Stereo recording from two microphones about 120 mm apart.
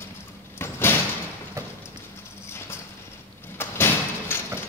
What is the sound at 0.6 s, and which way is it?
Sliding door, 20° left (ahead or behind).